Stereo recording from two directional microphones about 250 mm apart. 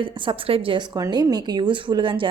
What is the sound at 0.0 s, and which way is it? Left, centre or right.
A woman's voice, centre.